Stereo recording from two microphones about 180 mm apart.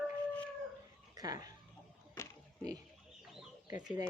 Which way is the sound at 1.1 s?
20° right (ahead or behind).